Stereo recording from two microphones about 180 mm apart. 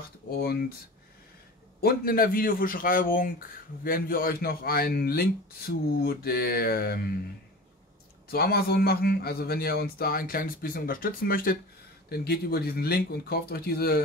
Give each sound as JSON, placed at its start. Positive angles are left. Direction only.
{"t": 0.4, "sound": "a man's voice", "side_deg": 60}
{"t": 1.8, "sound": "a man's voice", "side_deg": 55}
{"t": 8.3, "sound": "a man's voice", "side_deg": 60}